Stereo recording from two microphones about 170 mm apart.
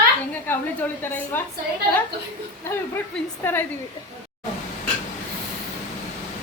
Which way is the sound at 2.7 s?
15° left (ahead or behind).